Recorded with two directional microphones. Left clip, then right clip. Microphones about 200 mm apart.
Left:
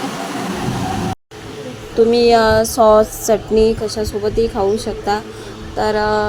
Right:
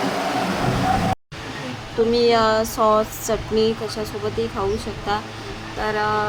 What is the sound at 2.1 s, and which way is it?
Speech, 25° left (ahead or behind).